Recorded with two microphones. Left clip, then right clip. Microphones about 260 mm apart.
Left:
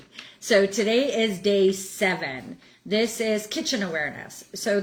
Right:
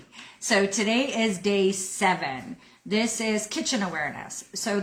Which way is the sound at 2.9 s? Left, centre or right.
Right.